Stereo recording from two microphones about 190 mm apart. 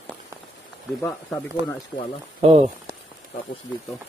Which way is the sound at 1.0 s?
10° left (ahead or behind).